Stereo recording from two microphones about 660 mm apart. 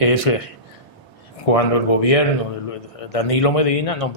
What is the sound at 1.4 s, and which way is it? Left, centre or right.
A man's voice, left.